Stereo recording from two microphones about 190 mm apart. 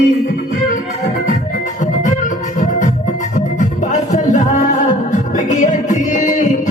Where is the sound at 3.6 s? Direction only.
40° left (ahead or behind).